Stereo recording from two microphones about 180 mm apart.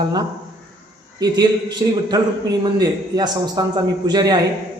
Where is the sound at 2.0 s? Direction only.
20° right (ahead or behind).